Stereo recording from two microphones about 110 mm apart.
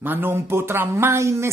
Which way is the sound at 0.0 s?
20° right (ahead or behind).